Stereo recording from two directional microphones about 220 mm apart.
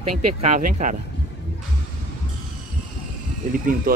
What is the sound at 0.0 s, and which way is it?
Speech, 90° right.